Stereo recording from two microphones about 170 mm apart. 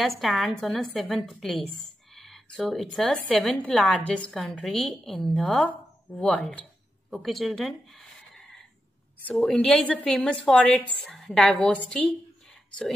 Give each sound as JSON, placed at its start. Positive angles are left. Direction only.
{"t": 0.2, "sound": "speech", "side_deg": 0}
{"t": 7.1, "sound": "a sound", "side_deg": 0}
{"t": 9.2, "sound": "speech", "side_deg": 5}